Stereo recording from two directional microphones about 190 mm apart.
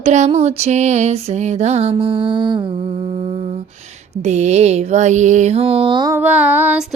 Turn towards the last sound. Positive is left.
turn(degrees=-10)  # may be behind; listen again after turning